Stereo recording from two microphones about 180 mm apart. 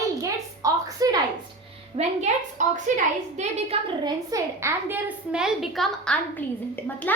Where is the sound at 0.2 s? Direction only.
20° right (ahead or behind).